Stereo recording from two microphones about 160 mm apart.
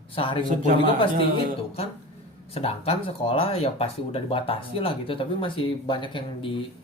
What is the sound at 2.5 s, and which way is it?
Speech, 40° left (ahead or behind).